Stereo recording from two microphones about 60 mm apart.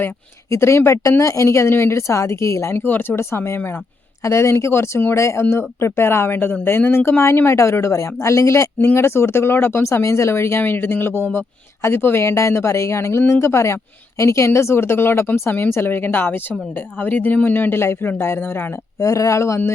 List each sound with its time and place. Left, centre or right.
0.5 s speech: left
2.7 s speech: left
3.2 s speech: left
5.1 s speech: left
18.9 s speech: left